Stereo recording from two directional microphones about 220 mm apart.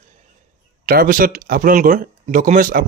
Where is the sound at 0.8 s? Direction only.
40° right (ahead or behind).